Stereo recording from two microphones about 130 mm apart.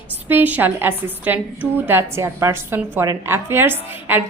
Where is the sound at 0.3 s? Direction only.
15° right (ahead or behind).